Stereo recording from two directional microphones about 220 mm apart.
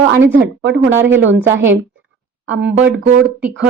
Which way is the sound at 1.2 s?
55° right (ahead or behind).